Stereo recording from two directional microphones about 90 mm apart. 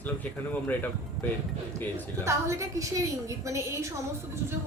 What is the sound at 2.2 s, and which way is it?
A woman's voice, 35° right (ahead or behind).